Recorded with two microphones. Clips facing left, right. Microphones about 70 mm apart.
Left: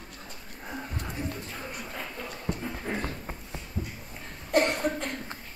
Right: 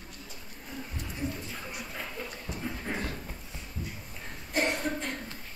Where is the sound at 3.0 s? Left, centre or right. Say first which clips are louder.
Left 2 dB; left.